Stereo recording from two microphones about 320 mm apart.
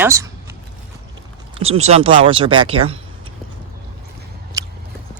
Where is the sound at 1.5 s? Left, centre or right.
Centre.